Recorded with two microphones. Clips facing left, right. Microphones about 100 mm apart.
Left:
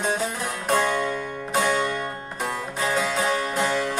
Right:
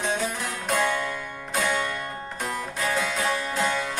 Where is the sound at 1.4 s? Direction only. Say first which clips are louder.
Left 3 dB; 20° left (ahead or behind).